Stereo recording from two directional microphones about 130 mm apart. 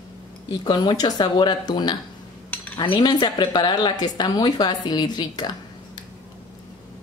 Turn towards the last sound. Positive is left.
turn(degrees=30)  # may be behind; listen again after turning